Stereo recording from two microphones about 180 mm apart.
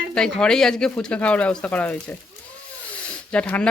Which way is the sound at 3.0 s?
5° left (ahead or behind).